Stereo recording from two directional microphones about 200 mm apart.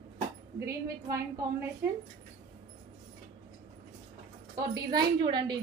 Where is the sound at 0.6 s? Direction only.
15° right (ahead or behind).